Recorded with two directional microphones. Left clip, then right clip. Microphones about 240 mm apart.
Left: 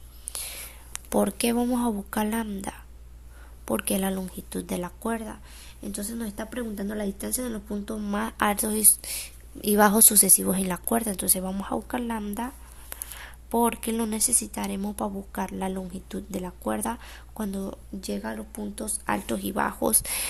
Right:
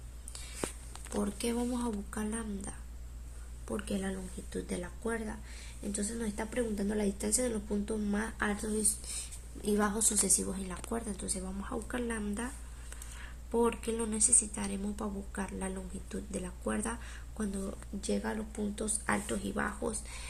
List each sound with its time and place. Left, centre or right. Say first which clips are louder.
0.3 s whispering: left 11 dB; left
0.9 s speech: left 13 dB; left